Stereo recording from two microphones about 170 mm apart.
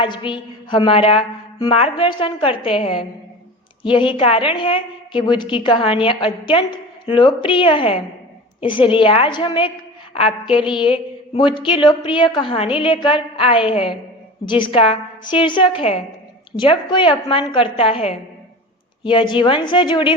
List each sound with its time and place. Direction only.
0.0 s a woman's voice: 30° left (ahead or behind)